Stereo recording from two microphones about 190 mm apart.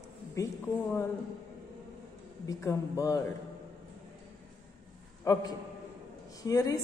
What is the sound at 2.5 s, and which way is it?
Speech, 15° left (ahead or behind).